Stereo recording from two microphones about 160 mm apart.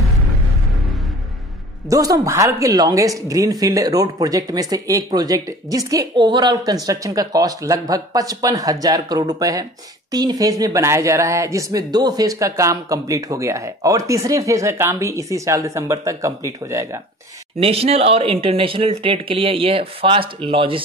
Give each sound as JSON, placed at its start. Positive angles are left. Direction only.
{"t": 1.9, "sound": "speech", "side_deg": -20}
{"t": 17.6, "sound": "speech", "side_deg": -40}